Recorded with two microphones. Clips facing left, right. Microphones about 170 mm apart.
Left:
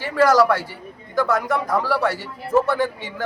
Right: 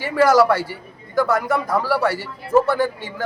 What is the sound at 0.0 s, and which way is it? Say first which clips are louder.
A man's voice: right 1 dB; 10° right (ahead or behind).